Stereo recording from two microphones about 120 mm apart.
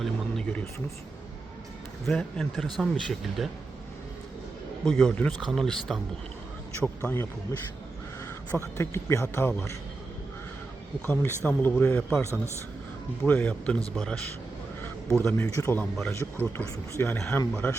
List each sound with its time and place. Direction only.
0.0 s a sound: 5° left (ahead or behind)
2.0 s speech: 5° left (ahead or behind)
4.9 s speech: centre (ahead or behind)
6.8 s speech: 20° left (ahead or behind)
8.5 s speech: 20° left (ahead or behind)
11.0 s a man's voice: 15° left (ahead or behind)
15.2 s speech: 20° left (ahead or behind)
16.0 s a man's voice: 15° left (ahead or behind)